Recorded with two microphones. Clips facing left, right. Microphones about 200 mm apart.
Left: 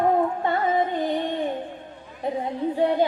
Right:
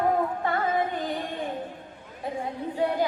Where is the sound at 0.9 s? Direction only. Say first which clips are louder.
Left 6 dB; 20° left (ahead or behind).